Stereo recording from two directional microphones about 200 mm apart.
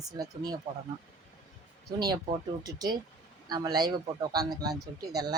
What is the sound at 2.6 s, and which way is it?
A woman's voice, 20° right (ahead or behind).